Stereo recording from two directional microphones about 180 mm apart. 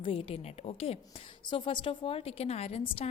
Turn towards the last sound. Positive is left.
turn(degrees=35)  # may be behind; listen again after turning